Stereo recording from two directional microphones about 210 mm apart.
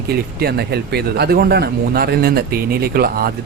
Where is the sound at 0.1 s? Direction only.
50° right (ahead or behind).